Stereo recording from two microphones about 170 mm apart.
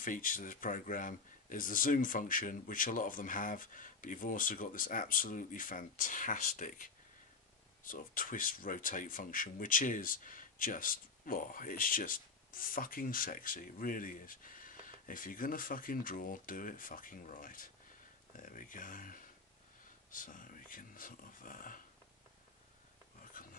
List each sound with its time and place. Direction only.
0.0 s speech: 55° left (ahead or behind)